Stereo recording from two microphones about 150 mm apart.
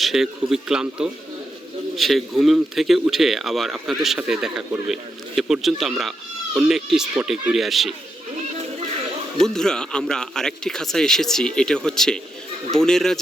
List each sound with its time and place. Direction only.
0.0 s speech: centre (ahead or behind)
9.4 s speech: 5° left (ahead or behind)